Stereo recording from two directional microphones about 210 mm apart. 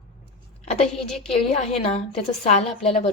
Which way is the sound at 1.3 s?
30° left (ahead or behind).